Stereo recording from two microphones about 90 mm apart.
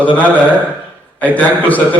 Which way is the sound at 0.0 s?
15° left (ahead or behind).